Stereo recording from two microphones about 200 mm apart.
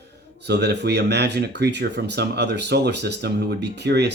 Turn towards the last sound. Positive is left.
turn(degrees=-55)  # may be behind; listen again after turning